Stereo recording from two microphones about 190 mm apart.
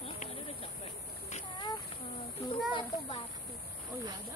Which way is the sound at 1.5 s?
25° left (ahead or behind).